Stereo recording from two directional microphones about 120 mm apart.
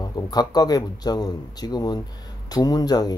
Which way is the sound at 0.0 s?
35° left (ahead or behind).